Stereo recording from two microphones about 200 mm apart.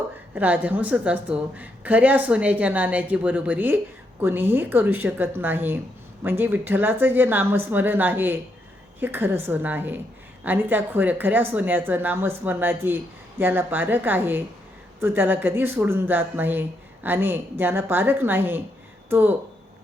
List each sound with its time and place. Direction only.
0.3 s speech: 5° right (ahead or behind)